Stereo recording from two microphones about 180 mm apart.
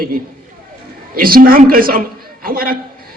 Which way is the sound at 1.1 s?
55° right (ahead or behind).